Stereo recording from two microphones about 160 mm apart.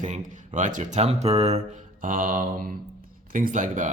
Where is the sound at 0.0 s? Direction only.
50° right (ahead or behind).